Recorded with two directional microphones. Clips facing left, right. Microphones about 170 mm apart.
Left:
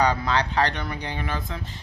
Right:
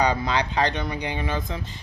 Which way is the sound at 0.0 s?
15° right (ahead or behind).